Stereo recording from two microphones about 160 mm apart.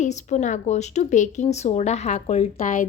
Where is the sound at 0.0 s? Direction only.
45° left (ahead or behind).